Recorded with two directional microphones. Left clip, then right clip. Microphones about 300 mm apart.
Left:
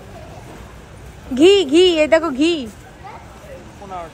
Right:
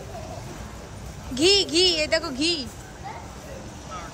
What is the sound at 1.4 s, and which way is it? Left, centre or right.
Speech, centre.